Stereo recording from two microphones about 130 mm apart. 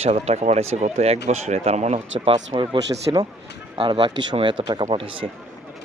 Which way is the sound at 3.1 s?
30° right (ahead or behind).